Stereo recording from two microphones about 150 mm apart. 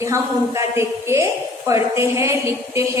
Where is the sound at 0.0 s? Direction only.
20° right (ahead or behind).